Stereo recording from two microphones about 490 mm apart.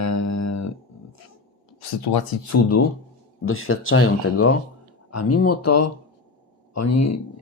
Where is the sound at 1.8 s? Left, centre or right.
Left.